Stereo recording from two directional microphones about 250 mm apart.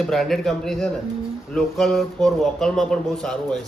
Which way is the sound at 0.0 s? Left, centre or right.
Centre.